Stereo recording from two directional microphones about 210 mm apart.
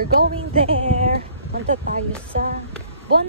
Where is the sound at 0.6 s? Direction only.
30° right (ahead or behind).